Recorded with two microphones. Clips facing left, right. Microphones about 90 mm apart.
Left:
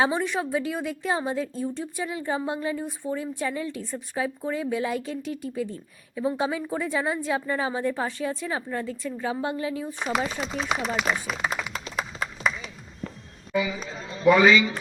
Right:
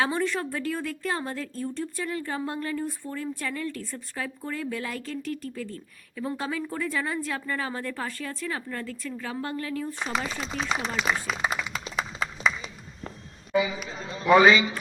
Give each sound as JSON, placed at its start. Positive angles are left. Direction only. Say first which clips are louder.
{"t": 0.0, "sound": "a woman's voice", "louder": "left 2 dB", "side_deg": 15}
{"t": 11.0, "sound": "speech", "louder": "even", "side_deg": 0}
{"t": 11.9, "sound": "clapping", "louder": "even", "side_deg": 0}
{"t": 12.6, "sound": "a sound", "louder": "left 2 dB", "side_deg": -20}
{"t": 14.3, "sound": "a man's voice", "louder": "even", "side_deg": -30}